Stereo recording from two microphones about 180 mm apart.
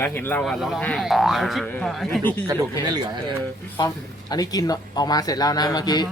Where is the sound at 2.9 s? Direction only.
25° right (ahead or behind).